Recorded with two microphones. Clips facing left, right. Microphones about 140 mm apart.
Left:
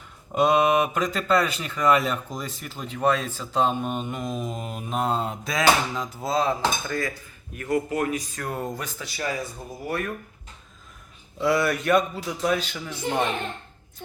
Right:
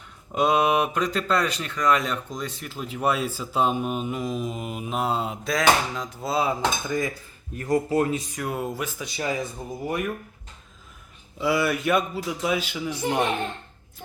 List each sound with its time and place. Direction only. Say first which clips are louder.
0.3 s speech: left 1 dB; centre (ahead or behind)
7.5 s speech: right 3 dB; 35° right (ahead or behind)
8.4 s speech: right 2 dB; 5° right (ahead or behind)
9.0 s speech: even; 20° right (ahead or behind)
11.3 s speech: left 1 dB; 5° right (ahead or behind)